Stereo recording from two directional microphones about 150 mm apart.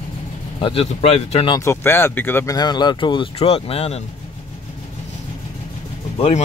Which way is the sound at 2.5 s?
30° left (ahead or behind).